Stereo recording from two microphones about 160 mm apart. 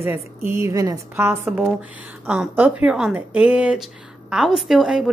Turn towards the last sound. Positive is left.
turn(degrees=-5)  # may be behind; listen again after turning